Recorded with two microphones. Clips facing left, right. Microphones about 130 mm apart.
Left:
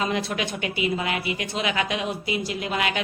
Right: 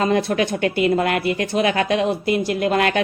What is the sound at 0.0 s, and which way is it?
Speech, 45° right (ahead or behind).